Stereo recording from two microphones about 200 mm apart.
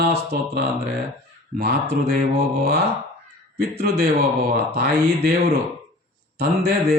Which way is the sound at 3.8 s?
55° right (ahead or behind).